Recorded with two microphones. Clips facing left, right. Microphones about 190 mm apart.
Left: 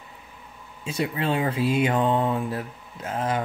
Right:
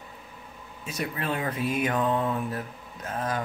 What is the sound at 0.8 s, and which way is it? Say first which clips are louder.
Speech: left 5 dB; 30° left (ahead or behind).